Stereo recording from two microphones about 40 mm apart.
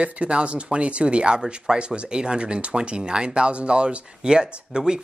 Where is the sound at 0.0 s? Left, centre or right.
Right.